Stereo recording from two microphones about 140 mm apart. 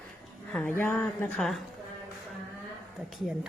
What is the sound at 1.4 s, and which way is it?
Speech, centre (ahead or behind).